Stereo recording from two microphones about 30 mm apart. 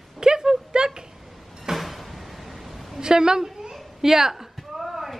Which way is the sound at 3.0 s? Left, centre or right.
Right.